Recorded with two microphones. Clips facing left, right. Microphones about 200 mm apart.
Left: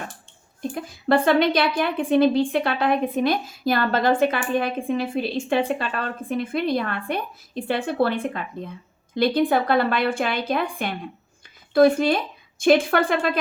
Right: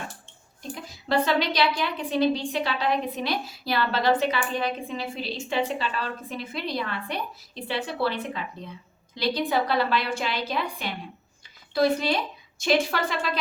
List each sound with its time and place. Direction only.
0.7 s a woman's voice: 55° left (ahead or behind)